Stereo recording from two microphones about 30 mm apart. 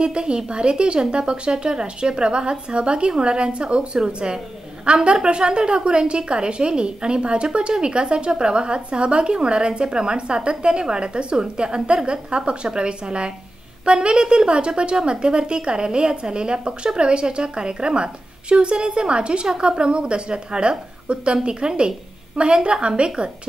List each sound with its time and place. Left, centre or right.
0.0 s speech: right
19.4 s speech: right